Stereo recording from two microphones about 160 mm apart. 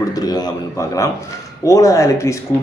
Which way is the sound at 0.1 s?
25° left (ahead or behind).